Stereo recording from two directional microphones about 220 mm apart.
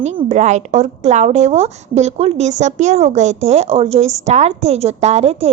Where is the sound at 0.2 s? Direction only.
30° right (ahead or behind).